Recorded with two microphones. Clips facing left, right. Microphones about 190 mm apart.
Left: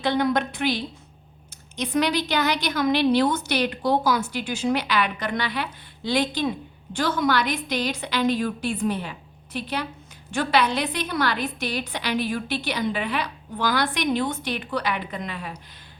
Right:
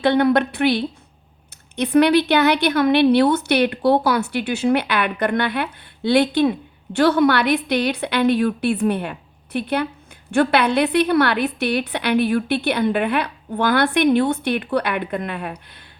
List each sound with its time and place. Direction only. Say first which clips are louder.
0.0 s speech: right 6 dB; 60° right (ahead or behind)